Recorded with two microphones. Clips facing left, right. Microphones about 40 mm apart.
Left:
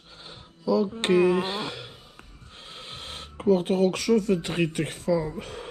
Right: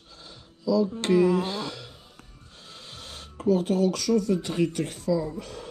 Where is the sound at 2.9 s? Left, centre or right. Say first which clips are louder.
Left 3 dB; left.